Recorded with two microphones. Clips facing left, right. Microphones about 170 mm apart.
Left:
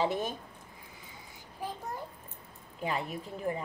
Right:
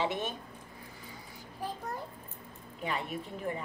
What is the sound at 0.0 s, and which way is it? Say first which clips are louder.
Speech: left 2 dB; 35° left (ahead or behind).